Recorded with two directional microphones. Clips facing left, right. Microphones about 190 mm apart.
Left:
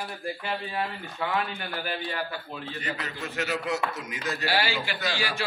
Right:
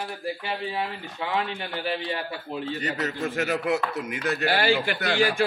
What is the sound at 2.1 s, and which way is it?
Speech, 30° right (ahead or behind).